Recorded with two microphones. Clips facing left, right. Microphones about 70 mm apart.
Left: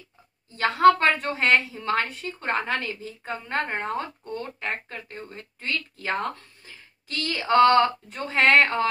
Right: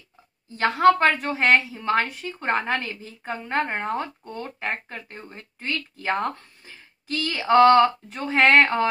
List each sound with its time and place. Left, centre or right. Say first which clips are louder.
0.6 s speech: even; right
1.3 s speech: right 2 dB; right